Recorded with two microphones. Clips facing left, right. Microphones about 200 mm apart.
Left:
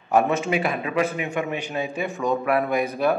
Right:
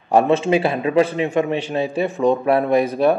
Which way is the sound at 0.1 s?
30° right (ahead or behind).